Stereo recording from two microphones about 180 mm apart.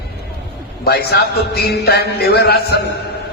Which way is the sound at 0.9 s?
60° left (ahead or behind).